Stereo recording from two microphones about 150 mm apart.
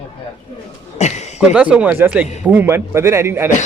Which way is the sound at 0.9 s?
50° left (ahead or behind).